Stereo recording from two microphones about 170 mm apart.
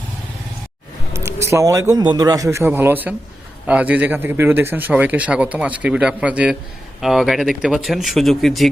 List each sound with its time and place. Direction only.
1.1 s a man's voice: 15° right (ahead or behind); by 8.7 s centre (ahead or behind)